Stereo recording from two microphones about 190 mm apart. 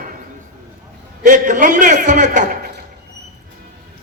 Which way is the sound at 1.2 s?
40° right (ahead or behind).